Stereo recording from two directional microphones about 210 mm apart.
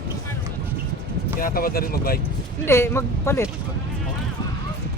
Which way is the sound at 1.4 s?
45° left (ahead or behind).